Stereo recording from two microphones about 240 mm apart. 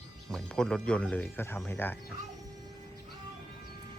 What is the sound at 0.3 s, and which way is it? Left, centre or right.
Speech, centre.